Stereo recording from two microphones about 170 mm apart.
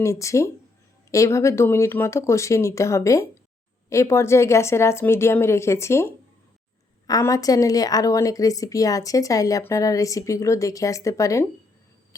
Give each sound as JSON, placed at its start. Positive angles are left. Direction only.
{"t": 0.0, "sound": "speech", "side_deg": 15}